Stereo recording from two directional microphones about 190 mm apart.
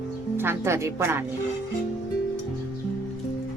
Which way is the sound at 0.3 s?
15° right (ahead or behind).